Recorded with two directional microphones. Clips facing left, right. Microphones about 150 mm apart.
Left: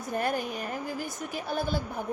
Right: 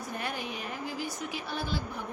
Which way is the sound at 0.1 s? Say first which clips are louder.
Left 8 dB; 45° left (ahead or behind).